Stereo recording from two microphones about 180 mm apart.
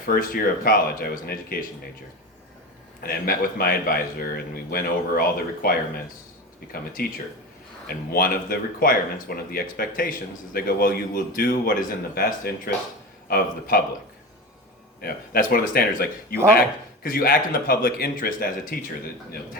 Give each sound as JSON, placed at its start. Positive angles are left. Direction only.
{"t": 0.1, "sound": "a man's voice", "side_deg": 55}
{"t": 3.0, "sound": "a man's voice", "side_deg": 55}
{"t": 15.0, "sound": "a man's voice", "side_deg": 55}